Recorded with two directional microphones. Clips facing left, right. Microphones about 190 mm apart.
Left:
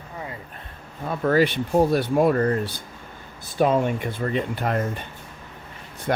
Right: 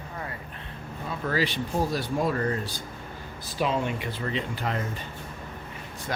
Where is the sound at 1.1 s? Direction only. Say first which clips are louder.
Left 8 dB; 55° left (ahead or behind).